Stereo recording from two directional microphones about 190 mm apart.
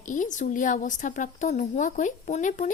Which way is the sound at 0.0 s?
40° left (ahead or behind).